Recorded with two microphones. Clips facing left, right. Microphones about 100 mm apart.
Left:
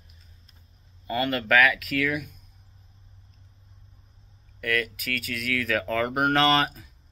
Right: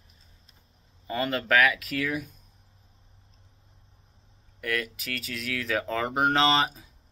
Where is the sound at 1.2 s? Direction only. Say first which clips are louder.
Left 2 dB; 30° right (ahead or behind).